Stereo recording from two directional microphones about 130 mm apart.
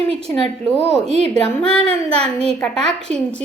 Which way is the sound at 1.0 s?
55° right (ahead or behind).